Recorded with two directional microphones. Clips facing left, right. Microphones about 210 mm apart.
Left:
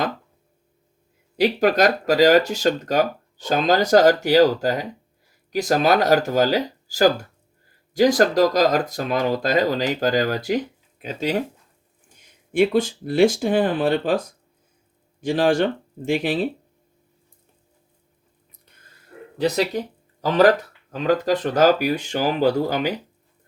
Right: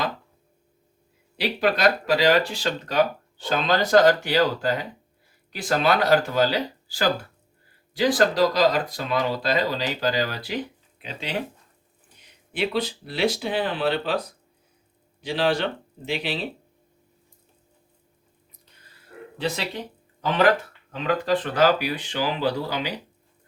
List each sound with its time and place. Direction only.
1.4 s speech: 45° left (ahead or behind)
19.4 s speech: 40° left (ahead or behind)
20.9 s speech: 40° left (ahead or behind)